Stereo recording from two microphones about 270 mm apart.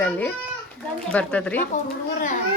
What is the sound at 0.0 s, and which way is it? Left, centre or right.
A child's voice, centre.